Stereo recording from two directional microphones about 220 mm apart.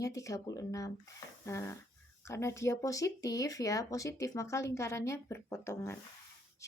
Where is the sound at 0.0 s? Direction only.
15° left (ahead or behind).